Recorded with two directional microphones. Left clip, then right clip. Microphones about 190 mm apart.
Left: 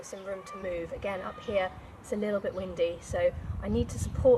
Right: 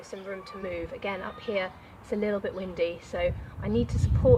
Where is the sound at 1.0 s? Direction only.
10° right (ahead or behind).